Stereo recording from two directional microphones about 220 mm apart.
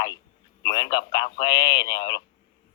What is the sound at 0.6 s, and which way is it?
Speech, 20° left (ahead or behind).